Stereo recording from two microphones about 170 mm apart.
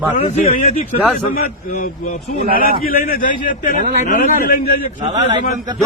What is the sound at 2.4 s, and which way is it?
Speech, 60° right (ahead or behind).